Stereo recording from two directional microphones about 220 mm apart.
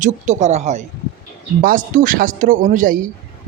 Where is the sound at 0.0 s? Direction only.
35° right (ahead or behind).